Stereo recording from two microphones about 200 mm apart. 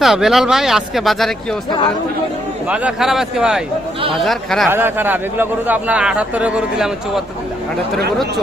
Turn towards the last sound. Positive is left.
turn(degrees=0)  # may be behind; listen again after turning